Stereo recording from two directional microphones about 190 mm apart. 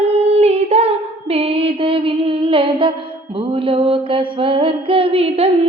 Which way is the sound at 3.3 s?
25° right (ahead or behind).